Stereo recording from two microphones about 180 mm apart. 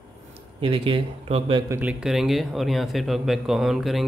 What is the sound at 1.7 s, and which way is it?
Speech, 10° right (ahead or behind).